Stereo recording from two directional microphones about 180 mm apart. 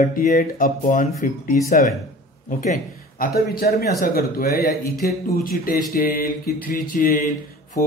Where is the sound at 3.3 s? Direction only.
55° left (ahead or behind).